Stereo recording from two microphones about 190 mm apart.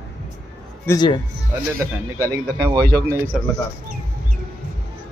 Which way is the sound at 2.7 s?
20° right (ahead or behind).